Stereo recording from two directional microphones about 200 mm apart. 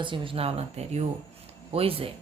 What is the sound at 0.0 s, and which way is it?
A woman's voice, 25° right (ahead or behind).